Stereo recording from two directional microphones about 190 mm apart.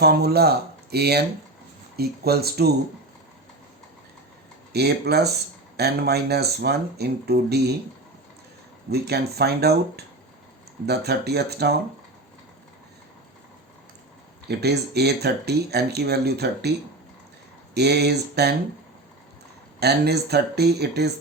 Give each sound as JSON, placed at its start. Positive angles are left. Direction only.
{"t": 0.0, "sound": "speech", "side_deg": -55}
{"t": 4.7, "sound": "speech", "side_deg": -60}
{"t": 8.9, "sound": "speech", "side_deg": -60}
{"t": 14.4, "sound": "speech", "side_deg": -60}
{"t": 17.7, "sound": "speech", "side_deg": -60}
{"t": 19.8, "sound": "speech", "side_deg": -60}